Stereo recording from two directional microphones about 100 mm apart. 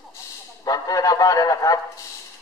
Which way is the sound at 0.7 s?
35° left (ahead or behind).